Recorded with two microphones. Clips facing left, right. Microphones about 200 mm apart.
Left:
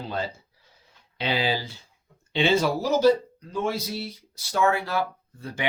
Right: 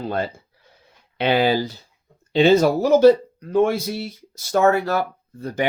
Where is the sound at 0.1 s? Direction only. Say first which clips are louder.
Right 6 dB; 55° right (ahead or behind).